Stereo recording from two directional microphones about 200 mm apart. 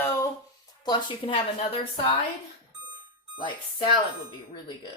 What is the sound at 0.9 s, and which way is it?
Speech, 25° left (ahead or behind).